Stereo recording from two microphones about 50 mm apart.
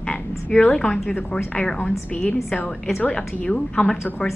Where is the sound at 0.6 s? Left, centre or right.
Left.